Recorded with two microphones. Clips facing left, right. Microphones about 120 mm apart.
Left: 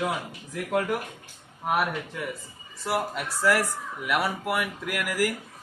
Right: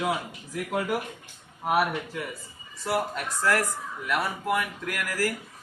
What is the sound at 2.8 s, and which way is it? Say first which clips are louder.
A man's voice: even; 5° left (ahead or behind).